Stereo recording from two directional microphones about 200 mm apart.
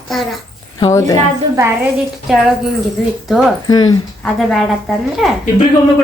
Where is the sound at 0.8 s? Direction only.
15° left (ahead or behind).